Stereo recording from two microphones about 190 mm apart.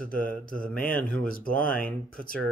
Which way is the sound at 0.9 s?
5° left (ahead or behind).